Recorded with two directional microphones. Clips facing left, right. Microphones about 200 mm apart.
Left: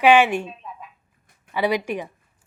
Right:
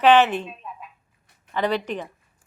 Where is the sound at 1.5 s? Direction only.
10° left (ahead or behind).